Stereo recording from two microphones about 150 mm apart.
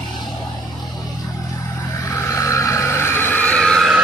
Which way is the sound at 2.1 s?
20° left (ahead or behind).